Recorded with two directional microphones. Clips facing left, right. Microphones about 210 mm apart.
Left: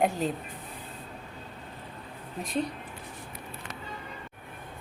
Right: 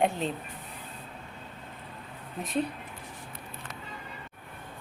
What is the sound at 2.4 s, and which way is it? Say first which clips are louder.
Speech: even; 5° right (ahead or behind).